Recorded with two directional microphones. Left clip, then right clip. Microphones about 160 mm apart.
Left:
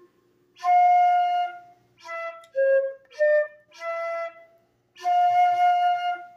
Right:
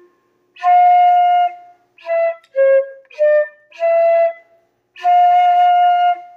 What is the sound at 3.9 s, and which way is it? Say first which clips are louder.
Flute: right 17 dB; 30° right (ahead or behind).